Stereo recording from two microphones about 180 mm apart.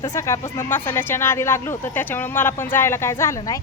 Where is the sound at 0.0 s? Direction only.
15° left (ahead or behind).